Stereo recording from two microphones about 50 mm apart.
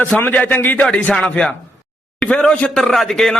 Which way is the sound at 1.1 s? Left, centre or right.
Centre.